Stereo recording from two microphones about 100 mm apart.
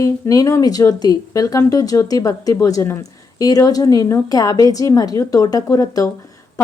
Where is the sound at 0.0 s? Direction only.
35° left (ahead or behind).